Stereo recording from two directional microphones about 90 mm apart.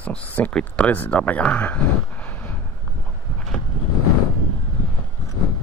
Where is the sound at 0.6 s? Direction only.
20° left (ahead or behind).